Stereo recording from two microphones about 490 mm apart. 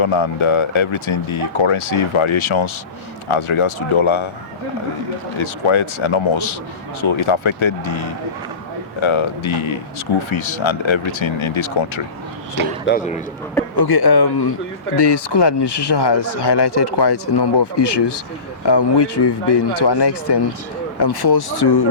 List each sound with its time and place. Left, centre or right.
0.0 s speech: left
5.4 s speech: left
12.8 s a man's voice: centre
13.7 s speech: left